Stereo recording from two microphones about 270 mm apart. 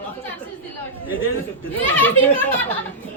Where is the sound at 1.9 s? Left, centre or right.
Centre.